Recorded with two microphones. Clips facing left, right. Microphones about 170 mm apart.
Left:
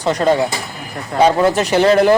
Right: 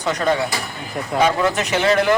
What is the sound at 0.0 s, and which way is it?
Speech, 30° left (ahead or behind).